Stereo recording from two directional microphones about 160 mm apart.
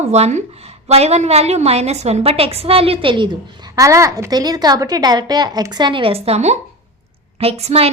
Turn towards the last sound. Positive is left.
turn(degrees=-40)  # may be behind; listen again after turning